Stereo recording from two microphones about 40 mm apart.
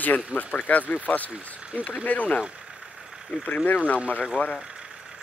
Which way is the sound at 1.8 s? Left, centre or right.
Left.